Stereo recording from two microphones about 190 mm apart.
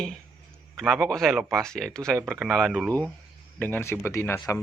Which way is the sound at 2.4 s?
Centre (ahead or behind).